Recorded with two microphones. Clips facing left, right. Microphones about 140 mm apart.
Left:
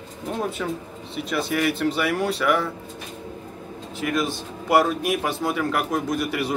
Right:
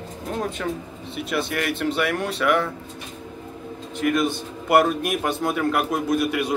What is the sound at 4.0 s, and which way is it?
A man's voice, centre (ahead or behind).